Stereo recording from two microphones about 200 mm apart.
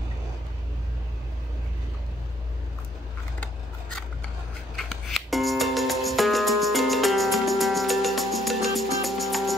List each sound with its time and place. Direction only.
4.7 s music: centre (ahead or behind)